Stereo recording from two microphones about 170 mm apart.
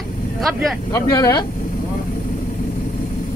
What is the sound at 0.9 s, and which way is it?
Speech, 20° left (ahead or behind).